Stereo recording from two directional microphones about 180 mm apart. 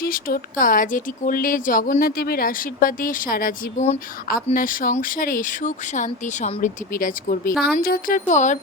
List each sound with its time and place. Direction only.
0.0 s speech: 50° left (ahead or behind)